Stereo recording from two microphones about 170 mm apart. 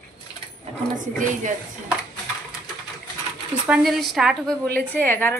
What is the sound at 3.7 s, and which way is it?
Speech, centre (ahead or behind).